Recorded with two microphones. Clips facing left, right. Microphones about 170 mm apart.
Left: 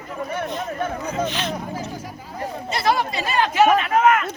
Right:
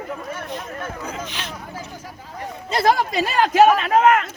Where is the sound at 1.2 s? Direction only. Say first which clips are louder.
Left 7 dB; 10° right (ahead or behind).